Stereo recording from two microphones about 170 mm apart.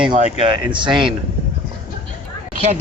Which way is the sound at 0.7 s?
30° right (ahead or behind).